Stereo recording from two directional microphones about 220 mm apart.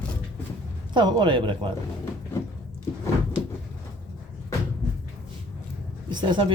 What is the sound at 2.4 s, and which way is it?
Cupboard open or close, 15° left (ahead or behind).